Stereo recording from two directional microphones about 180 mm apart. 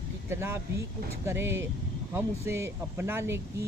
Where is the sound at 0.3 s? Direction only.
15° right (ahead or behind).